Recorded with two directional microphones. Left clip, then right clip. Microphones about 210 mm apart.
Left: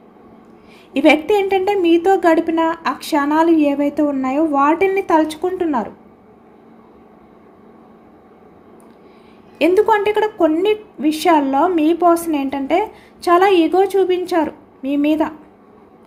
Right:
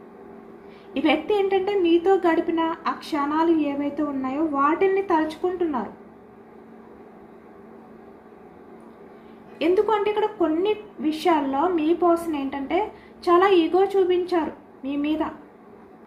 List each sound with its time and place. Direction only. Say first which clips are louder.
0.9 s a woman's voice: left 8 dB; 55° left (ahead or behind)
9.6 s a woman's voice: left 7 dB; 55° left (ahead or behind)